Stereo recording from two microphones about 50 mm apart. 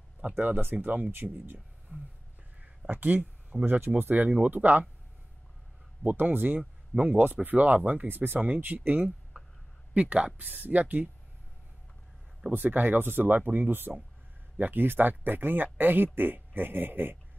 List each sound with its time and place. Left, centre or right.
0.7 s speech: right
6.0 s speech: right
9.3 s a sound: right
9.9 s speech: right
10.3 s speech: right
12.4 s speech: right